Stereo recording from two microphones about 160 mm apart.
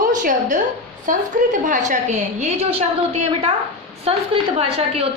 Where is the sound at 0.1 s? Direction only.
55° right (ahead or behind).